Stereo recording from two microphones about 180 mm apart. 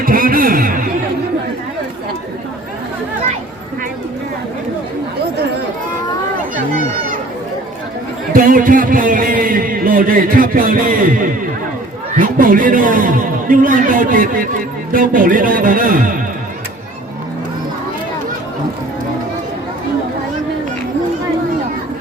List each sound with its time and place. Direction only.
0.0 s a sound: 50° right (ahead or behind)
8.3 s music: 50° right (ahead or behind)
12.1 s a man's voice: 50° right (ahead or behind)